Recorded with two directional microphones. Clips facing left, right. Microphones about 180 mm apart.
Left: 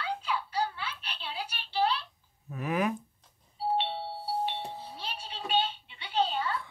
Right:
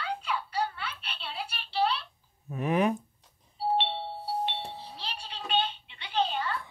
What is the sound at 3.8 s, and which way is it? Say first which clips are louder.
Doorbell: right 1 dB; 5° left (ahead or behind).